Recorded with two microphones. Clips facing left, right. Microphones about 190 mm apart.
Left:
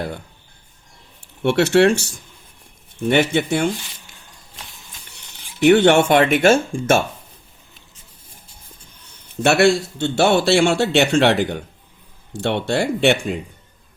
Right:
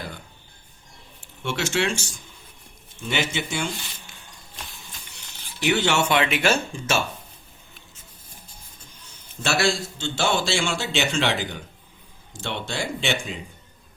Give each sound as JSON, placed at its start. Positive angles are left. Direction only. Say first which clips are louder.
{"t": 1.4, "sound": "a man's voice", "louder": "left 11 dB", "side_deg": 65}
{"t": 5.1, "sound": "speech", "louder": "left 1 dB", "side_deg": 60}
{"t": 9.0, "sound": "a man's voice", "louder": "left 12 dB", "side_deg": 60}